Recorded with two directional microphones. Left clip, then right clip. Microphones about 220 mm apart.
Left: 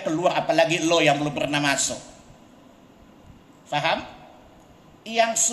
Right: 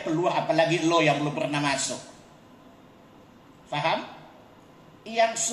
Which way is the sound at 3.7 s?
45° left (ahead or behind).